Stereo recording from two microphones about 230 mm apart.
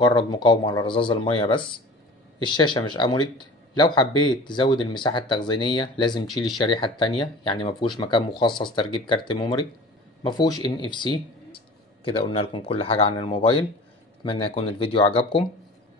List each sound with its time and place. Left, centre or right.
0.0 s speech: centre
6.2 s speech: centre
6.6 s speech: left